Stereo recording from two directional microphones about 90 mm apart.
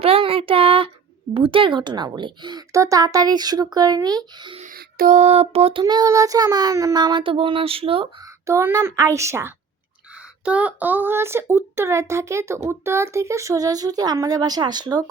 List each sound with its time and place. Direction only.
0.0 s a sound: 90° right
1.3 s speech: 85° right; by 2.6 s 55° right (ahead or behind)
2.7 s speech: 40° right (ahead or behind)
5.4 s child singing: 90° right
5.8 s speech: 45° right (ahead or behind)
6.9 s a sound: 55° right (ahead or behind); by 8.0 s 90° right
8.4 s speech: 35° right (ahead or behind)
10.4 s speech: 15° right (ahead or behind); by 15.1 s 50° right (ahead or behind)